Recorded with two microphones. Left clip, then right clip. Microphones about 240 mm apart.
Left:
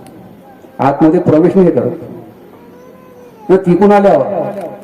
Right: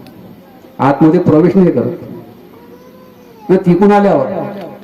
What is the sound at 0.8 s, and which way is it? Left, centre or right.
Speech, right.